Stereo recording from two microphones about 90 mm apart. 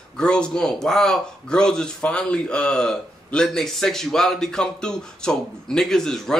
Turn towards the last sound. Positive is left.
turn(degrees=5)  # may be behind; listen again after turning